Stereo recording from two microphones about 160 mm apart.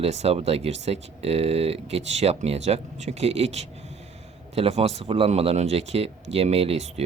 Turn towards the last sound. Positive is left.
turn(degrees=-40)  # may be behind; listen again after turning